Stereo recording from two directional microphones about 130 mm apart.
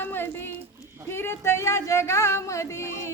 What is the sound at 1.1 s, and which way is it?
Speech, 20° left (ahead or behind).